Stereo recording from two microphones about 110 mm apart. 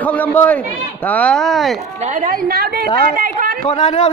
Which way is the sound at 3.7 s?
85° left.